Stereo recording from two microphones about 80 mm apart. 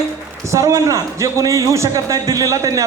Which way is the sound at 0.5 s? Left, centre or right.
Right.